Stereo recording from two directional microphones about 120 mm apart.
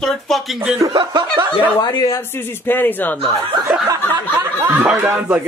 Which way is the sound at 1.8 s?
35° left (ahead or behind).